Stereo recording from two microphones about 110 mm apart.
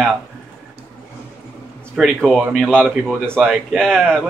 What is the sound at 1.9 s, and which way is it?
Speech, 5° right (ahead or behind).